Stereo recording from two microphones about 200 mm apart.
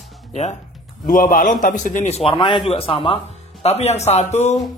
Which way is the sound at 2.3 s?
25° left (ahead or behind).